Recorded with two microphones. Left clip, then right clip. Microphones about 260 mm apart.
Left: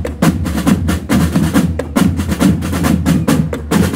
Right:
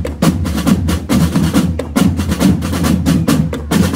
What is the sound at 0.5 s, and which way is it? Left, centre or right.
Music, centre.